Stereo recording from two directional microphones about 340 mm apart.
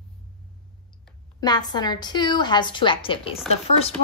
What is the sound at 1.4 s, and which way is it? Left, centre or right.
A woman's voice, centre.